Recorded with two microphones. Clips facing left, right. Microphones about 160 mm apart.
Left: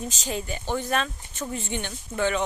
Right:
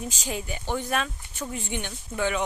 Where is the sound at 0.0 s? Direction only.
10° right (ahead or behind).